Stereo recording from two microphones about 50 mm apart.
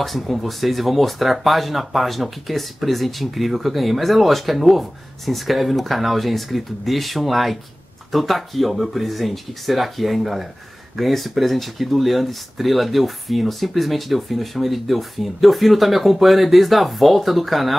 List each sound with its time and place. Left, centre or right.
0.0 s speech: centre